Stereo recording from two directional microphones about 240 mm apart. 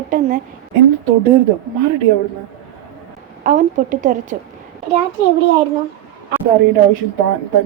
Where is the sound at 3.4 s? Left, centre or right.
Right.